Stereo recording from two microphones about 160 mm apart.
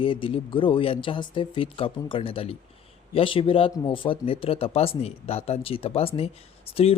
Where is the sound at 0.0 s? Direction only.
35° left (ahead or behind).